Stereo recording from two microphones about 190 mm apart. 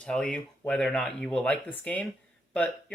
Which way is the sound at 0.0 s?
5° left (ahead or behind).